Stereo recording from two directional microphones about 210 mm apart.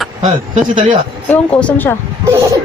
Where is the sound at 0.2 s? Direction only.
35° right (ahead or behind).